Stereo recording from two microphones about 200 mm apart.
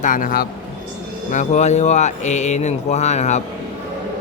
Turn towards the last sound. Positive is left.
turn(degrees=35)  # may be behind; listen again after turning